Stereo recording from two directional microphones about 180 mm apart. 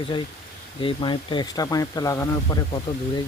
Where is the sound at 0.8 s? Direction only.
30° left (ahead or behind).